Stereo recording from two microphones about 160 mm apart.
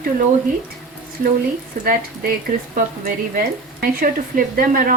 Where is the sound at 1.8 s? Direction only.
65° right (ahead or behind).